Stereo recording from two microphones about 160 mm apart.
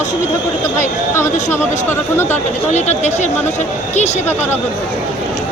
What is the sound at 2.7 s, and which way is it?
Speech, 45° left (ahead or behind).